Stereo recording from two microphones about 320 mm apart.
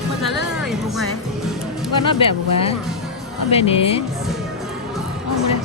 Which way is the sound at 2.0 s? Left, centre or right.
Centre.